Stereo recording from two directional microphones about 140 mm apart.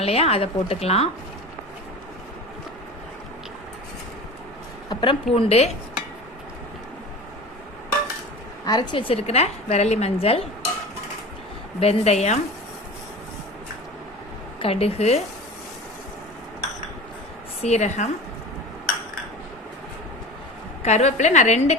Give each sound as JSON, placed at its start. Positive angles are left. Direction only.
{"t": 0.0, "sound": "a woman's voice", "side_deg": 45}
{"t": 4.9, "sound": "speech", "side_deg": 35}
{"t": 5.3, "sound": "a woman's voice", "side_deg": 45}
{"t": 8.6, "sound": "a woman's voice", "side_deg": 30}
{"t": 11.8, "sound": "a woman's voice", "side_deg": 50}
{"t": 14.6, "sound": "a woman's voice", "side_deg": 45}
{"t": 17.6, "sound": "a woman's voice", "side_deg": 55}
{"t": 20.8, "sound": "a woman's voice", "side_deg": 55}